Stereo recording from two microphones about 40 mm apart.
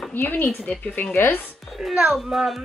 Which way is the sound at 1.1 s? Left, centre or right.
Left.